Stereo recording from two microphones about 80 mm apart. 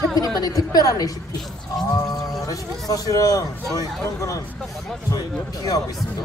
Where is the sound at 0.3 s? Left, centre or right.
Left.